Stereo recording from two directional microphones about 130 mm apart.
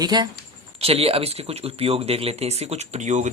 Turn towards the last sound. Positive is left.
turn(degrees=-70)  # may be behind; listen again after turning